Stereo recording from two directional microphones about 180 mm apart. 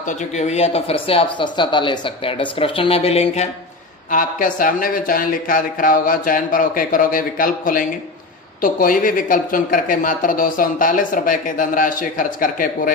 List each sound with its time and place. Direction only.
0.1 s speech: 40° left (ahead or behind)
4.1 s speech: 50° left (ahead or behind)